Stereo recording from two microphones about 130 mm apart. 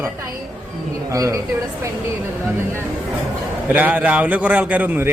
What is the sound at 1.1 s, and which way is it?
Speech, 25° right (ahead or behind).